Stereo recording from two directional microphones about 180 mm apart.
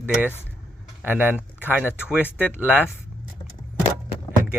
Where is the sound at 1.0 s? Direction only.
10° right (ahead or behind).